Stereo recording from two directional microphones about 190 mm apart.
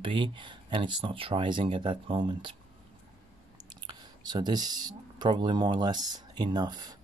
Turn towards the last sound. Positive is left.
turn(degrees=-20)  # may be behind; listen again after turning